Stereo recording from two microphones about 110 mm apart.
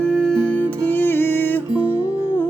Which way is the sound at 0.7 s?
15° left (ahead or behind).